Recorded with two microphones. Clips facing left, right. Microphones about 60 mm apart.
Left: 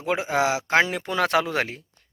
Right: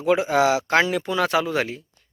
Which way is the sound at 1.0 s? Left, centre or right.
Left.